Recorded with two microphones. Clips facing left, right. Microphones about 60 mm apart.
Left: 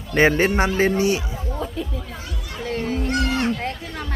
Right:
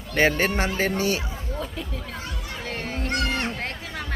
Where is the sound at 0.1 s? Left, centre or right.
Left.